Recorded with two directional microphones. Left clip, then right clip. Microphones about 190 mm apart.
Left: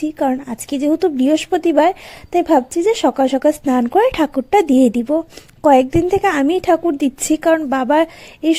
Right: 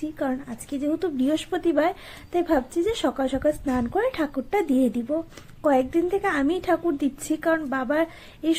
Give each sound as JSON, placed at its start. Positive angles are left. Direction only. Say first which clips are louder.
{"t": 0.0, "sound": "a woman's voice", "louder": "left 10 dB", "side_deg": 40}